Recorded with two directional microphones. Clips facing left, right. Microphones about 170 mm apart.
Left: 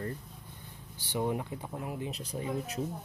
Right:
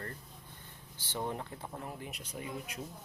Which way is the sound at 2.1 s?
30° left (ahead or behind).